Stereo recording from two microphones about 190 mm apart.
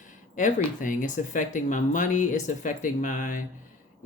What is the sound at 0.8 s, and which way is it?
Speech, 40° left (ahead or behind).